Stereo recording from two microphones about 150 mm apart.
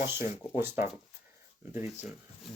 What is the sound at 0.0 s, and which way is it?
Speech, 15° right (ahead or behind).